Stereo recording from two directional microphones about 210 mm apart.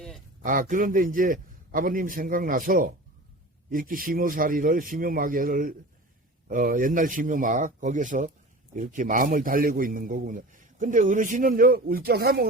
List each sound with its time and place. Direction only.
0.4 s a man's voice: 40° right (ahead or behind)